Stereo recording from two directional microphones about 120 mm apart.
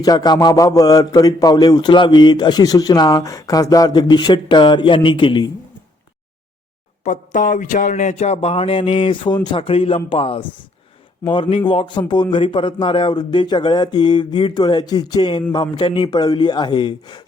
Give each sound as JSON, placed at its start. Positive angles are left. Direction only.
{"t": 0.0, "sound": "a man's voice", "side_deg": 35}
{"t": 7.0, "sound": "a sound", "side_deg": 90}
{"t": 9.6, "sound": "a man's voice", "side_deg": 55}